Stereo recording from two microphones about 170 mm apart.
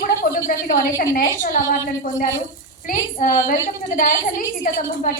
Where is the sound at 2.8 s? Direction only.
55° left (ahead or behind).